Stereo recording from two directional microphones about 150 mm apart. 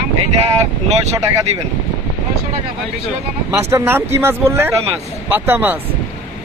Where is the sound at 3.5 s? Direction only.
15° right (ahead or behind).